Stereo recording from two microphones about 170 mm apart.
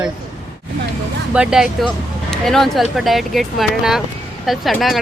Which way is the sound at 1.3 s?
5° right (ahead or behind).